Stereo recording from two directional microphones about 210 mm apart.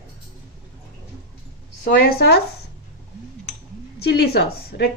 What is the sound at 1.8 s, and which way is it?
Speech, 45° left (ahead or behind).